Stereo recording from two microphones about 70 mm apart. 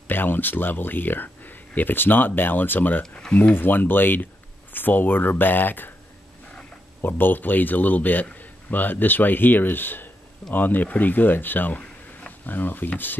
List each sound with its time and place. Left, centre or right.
0.1 s a man's voice: left
7.0 s a man's voice: left
11.8 s a sound: left